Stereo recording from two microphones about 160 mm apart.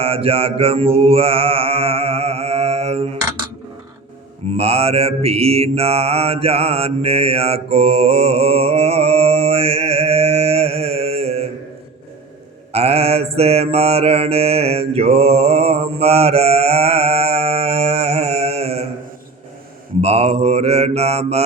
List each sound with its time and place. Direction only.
0.0 s mantra: 35° right (ahead or behind)
4.5 s mantra: 40° right (ahead or behind)
12.7 s mantra: 40° right (ahead or behind)
20.0 s mantra: 40° right (ahead or behind)